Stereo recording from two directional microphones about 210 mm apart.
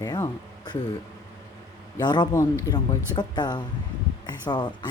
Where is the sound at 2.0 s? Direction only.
20° left (ahead or behind).